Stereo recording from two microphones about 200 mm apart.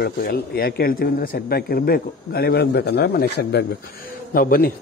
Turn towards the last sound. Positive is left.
turn(degrees=45)  # may be behind; listen again after turning